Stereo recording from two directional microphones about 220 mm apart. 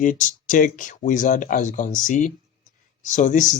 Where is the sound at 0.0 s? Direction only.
35° left (ahead or behind).